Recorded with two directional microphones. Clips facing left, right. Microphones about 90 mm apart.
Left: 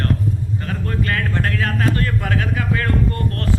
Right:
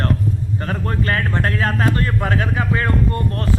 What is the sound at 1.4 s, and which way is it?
Speech, 35° right (ahead or behind).